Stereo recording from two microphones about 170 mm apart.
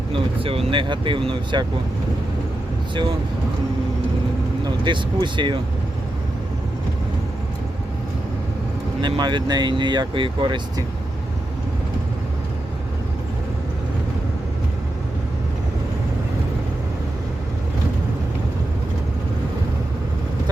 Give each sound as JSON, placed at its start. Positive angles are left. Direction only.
{"t": 0.1, "sound": "speech", "side_deg": -35}
{"t": 4.6, "sound": "speech", "side_deg": -25}
{"t": 9.0, "sound": "speech", "side_deg": -25}